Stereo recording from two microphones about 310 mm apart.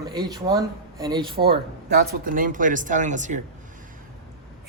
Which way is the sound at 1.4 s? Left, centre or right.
Right.